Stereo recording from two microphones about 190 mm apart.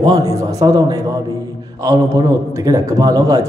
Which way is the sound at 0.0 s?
15° right (ahead or behind).